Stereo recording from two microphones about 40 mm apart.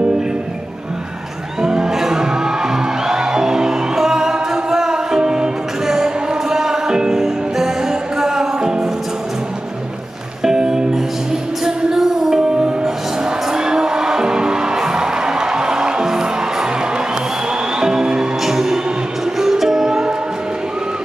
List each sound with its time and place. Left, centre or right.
1.6 s music: centre
10.4 s music: centre
12.0 s music: centre
17.7 s music: centre